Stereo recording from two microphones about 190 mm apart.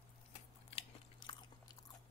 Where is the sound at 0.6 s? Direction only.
30° left (ahead or behind).